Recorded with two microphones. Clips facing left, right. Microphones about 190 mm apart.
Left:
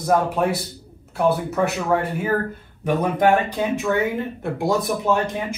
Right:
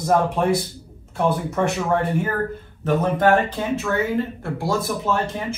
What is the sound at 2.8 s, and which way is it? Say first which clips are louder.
Speech: even; 15° left (ahead or behind).